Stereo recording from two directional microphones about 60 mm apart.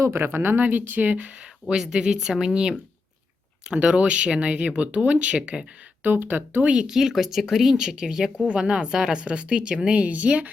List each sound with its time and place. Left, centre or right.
0.0 s speech: right
1.7 s speech: centre
6.0 s speech: right
6.7 s speech: centre
6.9 s speech: centre; by 10.5 s right